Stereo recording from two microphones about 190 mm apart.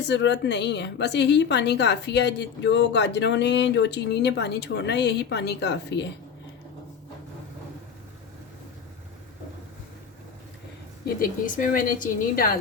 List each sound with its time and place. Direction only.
0.0 s a woman's voice: 65° left (ahead or behind)
11.0 s a woman's voice: 45° left (ahead or behind)